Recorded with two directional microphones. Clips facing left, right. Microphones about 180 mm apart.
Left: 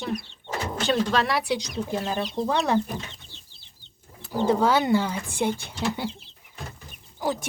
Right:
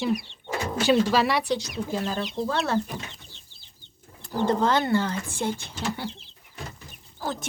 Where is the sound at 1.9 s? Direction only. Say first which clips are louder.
Left 1 dB; 20° left (ahead or behind).